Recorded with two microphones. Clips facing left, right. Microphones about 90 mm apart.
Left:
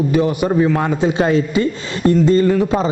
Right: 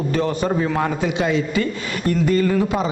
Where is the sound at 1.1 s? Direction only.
40° left (ahead or behind).